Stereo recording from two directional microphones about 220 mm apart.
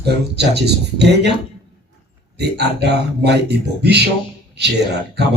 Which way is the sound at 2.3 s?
50° right (ahead or behind).